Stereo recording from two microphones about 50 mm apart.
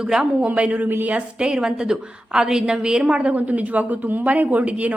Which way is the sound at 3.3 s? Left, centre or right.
Right.